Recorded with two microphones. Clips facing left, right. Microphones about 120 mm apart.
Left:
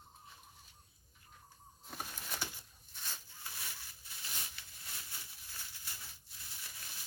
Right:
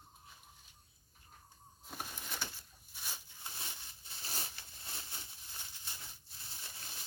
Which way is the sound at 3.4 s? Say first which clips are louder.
Right 1 dB; 25° right (ahead or behind).